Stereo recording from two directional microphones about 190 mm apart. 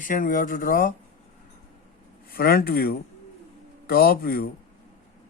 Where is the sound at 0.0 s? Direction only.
45° left (ahead or behind).